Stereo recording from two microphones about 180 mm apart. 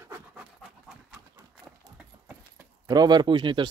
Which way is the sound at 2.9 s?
25° right (ahead or behind).